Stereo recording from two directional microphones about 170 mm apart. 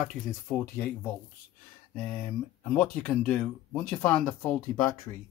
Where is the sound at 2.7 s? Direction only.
5° left (ahead or behind).